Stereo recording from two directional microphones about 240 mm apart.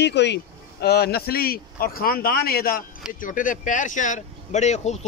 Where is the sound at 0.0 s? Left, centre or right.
Left.